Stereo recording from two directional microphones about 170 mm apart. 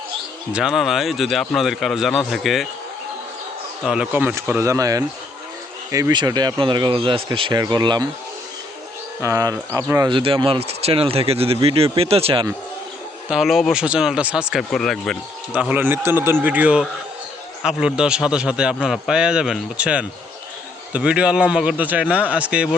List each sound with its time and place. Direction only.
0.5 s a man's voice: centre (ahead or behind)
3.8 s speech: 5° right (ahead or behind); by 8.0 s 25° right (ahead or behind)
9.2 s speech: 20° right (ahead or behind)
10.1 s speech: 30° right (ahead or behind)
13.3 s a man's voice: centre (ahead or behind)
15.5 s a man's voice: 10° right (ahead or behind)